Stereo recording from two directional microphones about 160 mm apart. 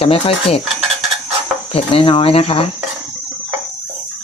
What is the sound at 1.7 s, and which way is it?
Dishes, 35° left (ahead or behind).